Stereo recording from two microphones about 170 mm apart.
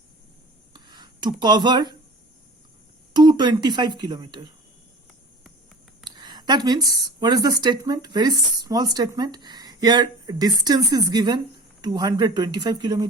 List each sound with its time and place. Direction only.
0.7 s a sound: 25° right (ahead or behind)
3.1 s speech: 25° right (ahead or behind)
6.1 s speech: 25° right (ahead or behind)